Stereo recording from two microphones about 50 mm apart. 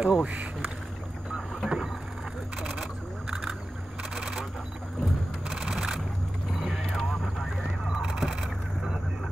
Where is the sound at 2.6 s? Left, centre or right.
Centre.